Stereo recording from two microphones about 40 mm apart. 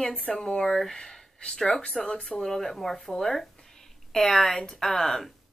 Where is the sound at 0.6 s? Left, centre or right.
Centre; by 2.4 s left.